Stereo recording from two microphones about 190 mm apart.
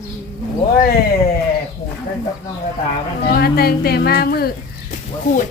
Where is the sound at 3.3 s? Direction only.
55° left (ahead or behind).